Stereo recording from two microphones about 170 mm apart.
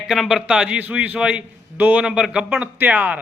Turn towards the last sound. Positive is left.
turn(degrees=-10)  # may be behind; listen again after turning